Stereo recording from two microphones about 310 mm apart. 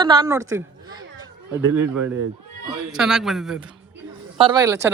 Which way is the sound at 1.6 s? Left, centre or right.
Right.